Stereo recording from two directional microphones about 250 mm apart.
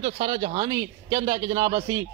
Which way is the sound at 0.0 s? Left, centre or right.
Centre.